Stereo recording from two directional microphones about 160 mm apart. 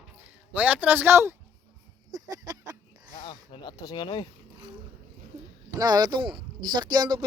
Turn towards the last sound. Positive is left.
turn(degrees=-25)  # may be behind; listen again after turning